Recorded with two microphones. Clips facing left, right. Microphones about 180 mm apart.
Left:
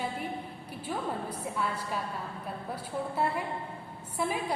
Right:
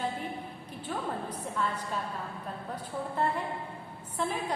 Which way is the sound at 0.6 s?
10° left (ahead or behind).